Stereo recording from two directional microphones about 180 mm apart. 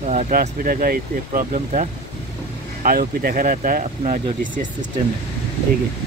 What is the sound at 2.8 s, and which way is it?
Speech, 55° right (ahead or behind).